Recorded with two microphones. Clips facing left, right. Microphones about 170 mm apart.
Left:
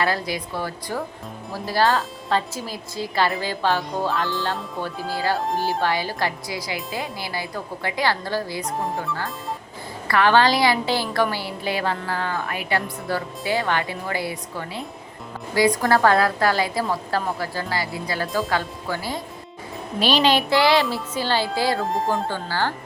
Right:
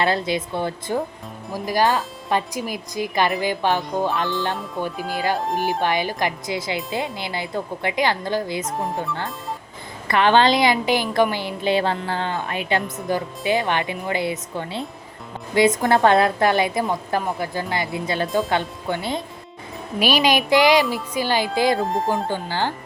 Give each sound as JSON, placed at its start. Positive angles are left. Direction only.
{"t": 0.0, "sound": "a woman's voice", "side_deg": -25}
{"t": 8.6, "sound": "speech", "side_deg": 0}
{"t": 10.1, "sound": "a woman's voice", "side_deg": -20}
{"t": 20.0, "sound": "speech", "side_deg": -10}
{"t": 21.8, "sound": "speech", "side_deg": 0}
{"t": 22.3, "sound": "speech", "side_deg": -20}